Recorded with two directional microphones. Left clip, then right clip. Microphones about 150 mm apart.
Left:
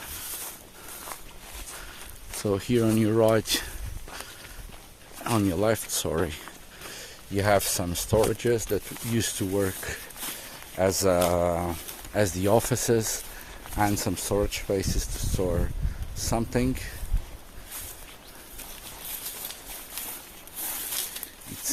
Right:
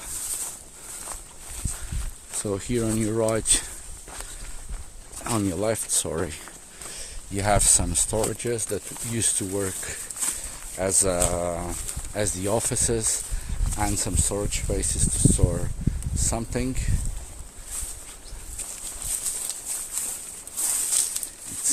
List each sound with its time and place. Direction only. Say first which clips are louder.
1.0 s walk: left 1 dB; centre (ahead or behind)
2.4 s speech: left 2 dB; 20° left (ahead or behind)
5.2 s speech: left 1 dB; 5° left (ahead or behind)
5.5 s speech: even; 20° left (ahead or behind); by 6.5 s 5° left (ahead or behind)
6.9 s a sound: left 3 dB; 20° left (ahead or behind)
7.6 s speech: right 6 dB; 5° left (ahead or behind)
8.3 s speech: left 3 dB; 30° left (ahead or behind)
16.2 s speech: left 2 dB; 35° left (ahead or behind)